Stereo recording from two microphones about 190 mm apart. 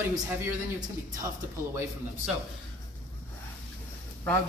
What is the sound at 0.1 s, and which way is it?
Speech, 20° right (ahead or behind).